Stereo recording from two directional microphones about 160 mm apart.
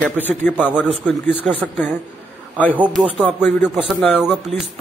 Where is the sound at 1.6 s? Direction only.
5° left (ahead or behind).